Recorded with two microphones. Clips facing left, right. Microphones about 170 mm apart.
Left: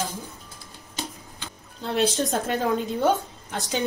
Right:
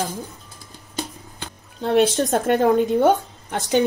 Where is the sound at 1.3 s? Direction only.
55° right (ahead or behind).